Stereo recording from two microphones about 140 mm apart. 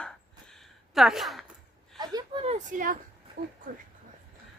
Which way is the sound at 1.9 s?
30° right (ahead or behind).